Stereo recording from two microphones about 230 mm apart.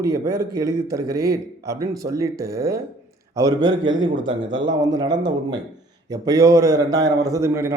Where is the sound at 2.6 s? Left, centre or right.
Centre.